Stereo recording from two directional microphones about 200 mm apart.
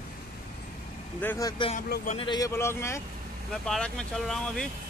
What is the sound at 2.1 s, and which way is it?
A man's voice, 20° left (ahead or behind).